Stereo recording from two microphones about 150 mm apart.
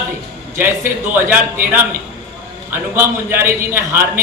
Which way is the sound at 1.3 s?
15° right (ahead or behind).